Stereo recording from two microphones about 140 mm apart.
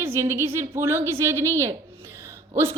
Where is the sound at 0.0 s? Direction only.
20° right (ahead or behind).